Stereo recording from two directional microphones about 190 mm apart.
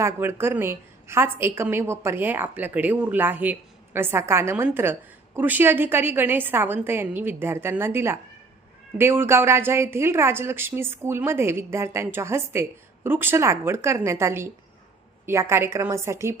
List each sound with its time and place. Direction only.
0.0 s a woman's voice: 10° right (ahead or behind)